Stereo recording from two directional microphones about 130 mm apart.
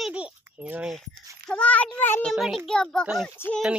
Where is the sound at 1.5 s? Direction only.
10° left (ahead or behind).